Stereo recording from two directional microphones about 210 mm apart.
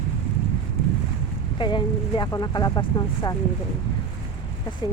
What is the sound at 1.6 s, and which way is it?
Speech, 20° left (ahead or behind).